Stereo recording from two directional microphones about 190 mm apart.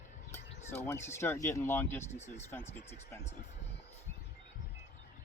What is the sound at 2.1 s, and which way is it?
Speech, 35° left (ahead or behind).